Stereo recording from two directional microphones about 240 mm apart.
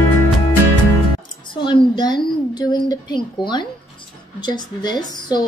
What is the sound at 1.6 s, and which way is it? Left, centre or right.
A woman's voice, centre.